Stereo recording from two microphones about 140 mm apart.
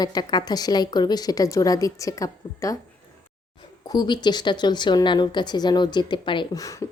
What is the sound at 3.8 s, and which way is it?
A woman's voice, 30° left (ahead or behind).